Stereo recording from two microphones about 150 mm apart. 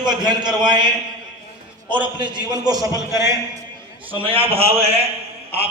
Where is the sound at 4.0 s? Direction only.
35° right (ahead or behind).